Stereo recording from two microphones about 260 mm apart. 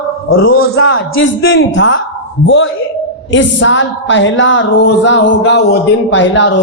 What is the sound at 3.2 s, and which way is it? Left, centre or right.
Speech, left.